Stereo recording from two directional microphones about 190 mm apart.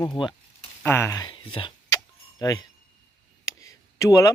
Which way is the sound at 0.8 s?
15° left (ahead or behind).